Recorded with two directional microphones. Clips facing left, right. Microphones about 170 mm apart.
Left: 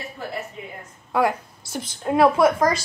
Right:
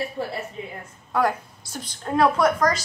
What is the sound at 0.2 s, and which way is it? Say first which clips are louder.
Speech: right 1 dB; 30° right (ahead or behind).